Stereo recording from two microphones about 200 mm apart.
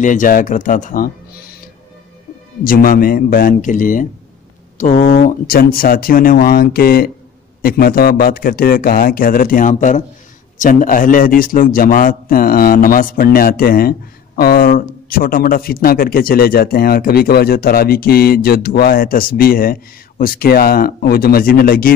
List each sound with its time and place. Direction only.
0.0 s speech: 40° left (ahead or behind)
2.6 s a man's voice: 45° left (ahead or behind)